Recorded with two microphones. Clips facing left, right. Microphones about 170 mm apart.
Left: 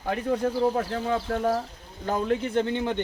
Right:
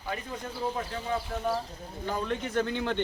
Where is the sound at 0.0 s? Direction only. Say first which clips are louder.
Left 11 dB; 55° left (ahead or behind).